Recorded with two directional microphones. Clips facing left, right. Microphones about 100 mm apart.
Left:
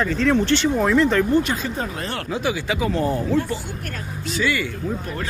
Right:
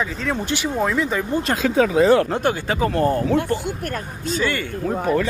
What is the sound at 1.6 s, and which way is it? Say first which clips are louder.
Speech: right 12 dB; 90° right.